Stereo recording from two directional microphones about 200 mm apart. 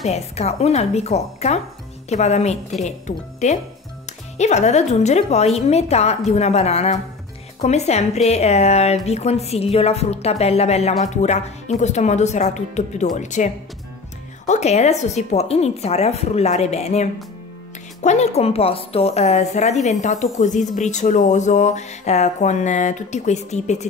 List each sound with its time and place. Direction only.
0.0 s speech: 30° left (ahead or behind)